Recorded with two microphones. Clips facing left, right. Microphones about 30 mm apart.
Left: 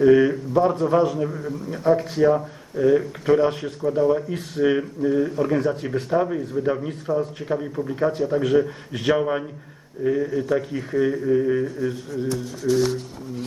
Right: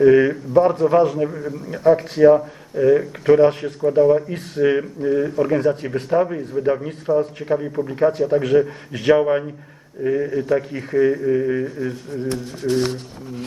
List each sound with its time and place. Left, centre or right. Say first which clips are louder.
0.0 s speech: right 2 dB; centre
2.0 s speech: right 6 dB; right
2.3 s speech: right 6 dB; centre
8.9 s speech: right 8 dB; right; by 11.9 s centre
12.1 s speech: right 1 dB; right